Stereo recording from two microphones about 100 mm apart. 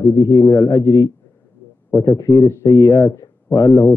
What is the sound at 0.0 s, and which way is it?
A man's voice, 35° left (ahead or behind).